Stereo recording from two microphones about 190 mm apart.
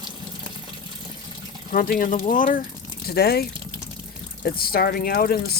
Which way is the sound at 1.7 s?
45° left (ahead or behind).